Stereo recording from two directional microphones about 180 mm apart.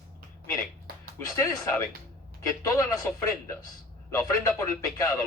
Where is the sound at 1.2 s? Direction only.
20° left (ahead or behind).